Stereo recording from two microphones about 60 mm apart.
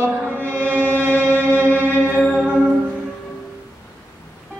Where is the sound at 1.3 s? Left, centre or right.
Left.